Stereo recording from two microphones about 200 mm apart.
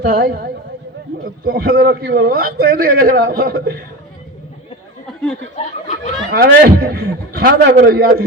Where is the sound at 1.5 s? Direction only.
50° right (ahead or behind).